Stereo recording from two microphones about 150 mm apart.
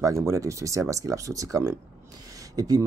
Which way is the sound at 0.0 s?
20° right (ahead or behind).